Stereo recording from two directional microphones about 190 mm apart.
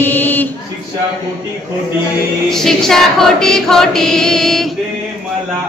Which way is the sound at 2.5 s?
Centre (ahead or behind).